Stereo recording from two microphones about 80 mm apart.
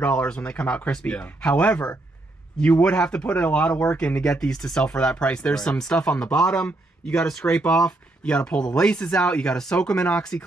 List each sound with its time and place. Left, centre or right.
0.0 s speech: centre